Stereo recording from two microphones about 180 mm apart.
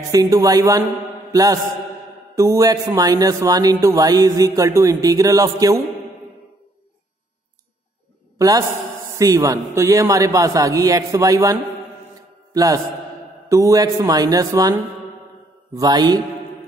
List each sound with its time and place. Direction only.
0.1 s speech: 20° right (ahead or behind)
8.4 s a man's voice: 20° right (ahead or behind)
12.5 s speech: 20° right (ahead or behind)